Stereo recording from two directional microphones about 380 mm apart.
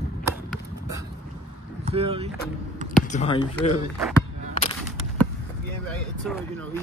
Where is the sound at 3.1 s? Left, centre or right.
Centre.